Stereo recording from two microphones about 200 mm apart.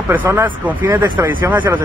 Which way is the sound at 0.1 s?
10° right (ahead or behind).